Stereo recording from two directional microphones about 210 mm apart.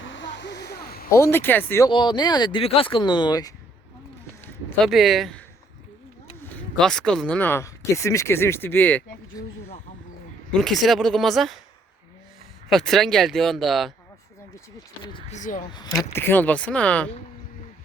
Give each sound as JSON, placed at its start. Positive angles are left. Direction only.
{"t": 0.0, "sound": "a sound", "side_deg": 60}
{"t": 1.1, "sound": "speech", "side_deg": 10}
{"t": 1.9, "sound": "speech", "side_deg": 20}
{"t": 4.8, "sound": "speech", "side_deg": 0}
{"t": 6.4, "sound": "speech", "side_deg": 5}
{"t": 10.5, "sound": "speech", "side_deg": 0}
{"t": 12.7, "sound": "speech", "side_deg": 0}
{"t": 15.0, "sound": "speech", "side_deg": 25}
{"t": 15.4, "sound": "speech", "side_deg": 40}
{"t": 16.0, "sound": "speech", "side_deg": 10}